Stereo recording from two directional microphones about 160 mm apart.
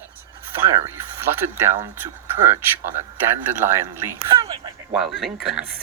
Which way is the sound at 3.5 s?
15° right (ahead or behind).